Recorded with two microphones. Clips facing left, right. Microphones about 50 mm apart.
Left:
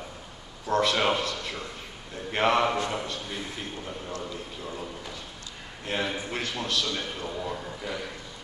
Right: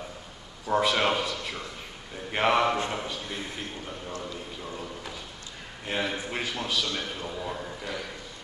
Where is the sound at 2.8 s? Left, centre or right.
Right.